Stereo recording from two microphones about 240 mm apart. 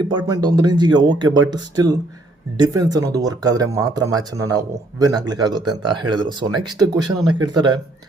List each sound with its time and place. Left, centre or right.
0.0 s speech: centre